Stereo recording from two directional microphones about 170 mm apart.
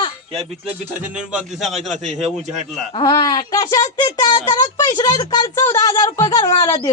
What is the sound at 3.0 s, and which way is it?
Speech, 20° left (ahead or behind).